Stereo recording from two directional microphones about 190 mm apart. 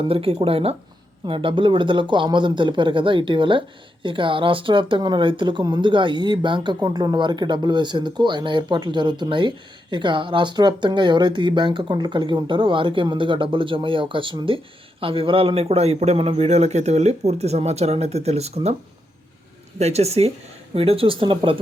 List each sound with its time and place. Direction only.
0.1 s speech: 30° right (ahead or behind)
19.8 s speech: 35° right (ahead or behind)